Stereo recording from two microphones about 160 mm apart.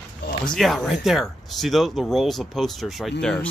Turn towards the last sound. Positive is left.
turn(degrees=5)  # may be behind; listen again after turning